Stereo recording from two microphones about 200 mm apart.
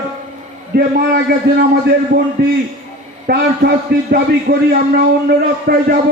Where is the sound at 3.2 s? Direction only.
55° right (ahead or behind).